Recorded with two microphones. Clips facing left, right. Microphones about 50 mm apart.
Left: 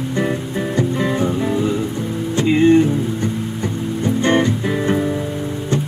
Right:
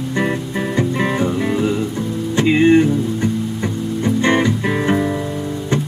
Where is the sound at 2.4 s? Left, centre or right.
Right.